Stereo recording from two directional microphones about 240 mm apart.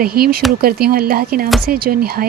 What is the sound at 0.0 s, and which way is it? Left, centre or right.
Speech, right.